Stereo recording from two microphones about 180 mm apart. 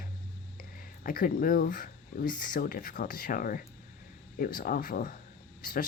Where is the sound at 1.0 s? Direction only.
50° left (ahead or behind).